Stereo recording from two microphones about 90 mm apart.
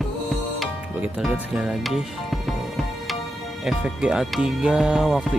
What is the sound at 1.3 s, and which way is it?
Music, 10° right (ahead or behind).